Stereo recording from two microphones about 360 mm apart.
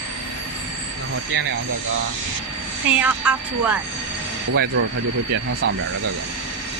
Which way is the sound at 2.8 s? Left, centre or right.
Centre.